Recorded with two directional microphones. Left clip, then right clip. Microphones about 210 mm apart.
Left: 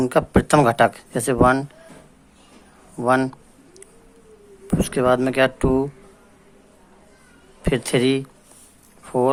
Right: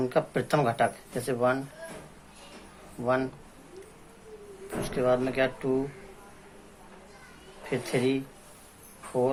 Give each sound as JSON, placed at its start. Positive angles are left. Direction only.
{"t": 0.0, "sound": "speech", "side_deg": 40}
{"t": 3.0, "sound": "speech", "side_deg": 40}
{"t": 4.8, "sound": "speech", "side_deg": 40}
{"t": 7.6, "sound": "speech", "side_deg": 45}